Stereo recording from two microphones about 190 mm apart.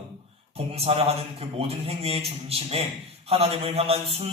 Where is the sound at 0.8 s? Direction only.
30° right (ahead or behind).